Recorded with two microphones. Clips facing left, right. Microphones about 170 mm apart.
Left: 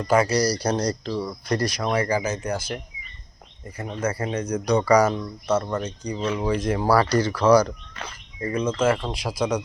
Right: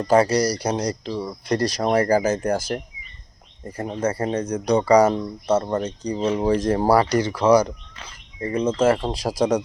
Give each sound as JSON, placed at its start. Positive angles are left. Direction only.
{"t": 0.0, "sound": "speech", "side_deg": -35}
{"t": 1.5, "sound": "speech", "side_deg": -35}
{"t": 6.9, "sound": "speech", "side_deg": -20}